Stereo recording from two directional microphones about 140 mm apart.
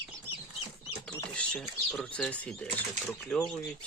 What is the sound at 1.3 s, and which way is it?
Speech, 5° left (ahead or behind).